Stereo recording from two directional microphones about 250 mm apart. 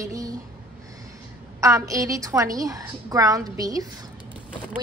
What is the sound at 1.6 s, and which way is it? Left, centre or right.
A woman's voice, centre.